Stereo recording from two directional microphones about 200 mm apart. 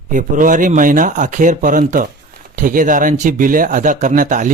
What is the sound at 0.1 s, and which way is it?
Speech, 40° right (ahead or behind).